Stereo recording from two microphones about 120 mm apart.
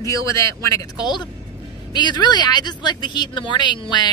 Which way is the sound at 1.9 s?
35° left (ahead or behind).